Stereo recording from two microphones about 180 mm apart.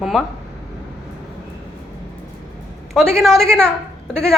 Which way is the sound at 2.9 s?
Centre (ahead or behind).